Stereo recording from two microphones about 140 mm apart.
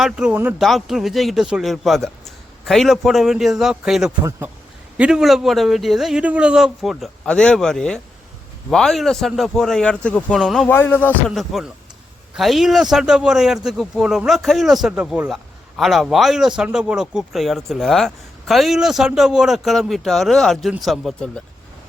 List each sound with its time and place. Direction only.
0.0 s speech: 5° right (ahead or behind)
4.2 s a man's voice: 20° right (ahead or behind)
4.9 s speech: 5° right (ahead or behind)
10.7 s music: 15° left (ahead or behind)
11.3 s speech: centre (ahead or behind)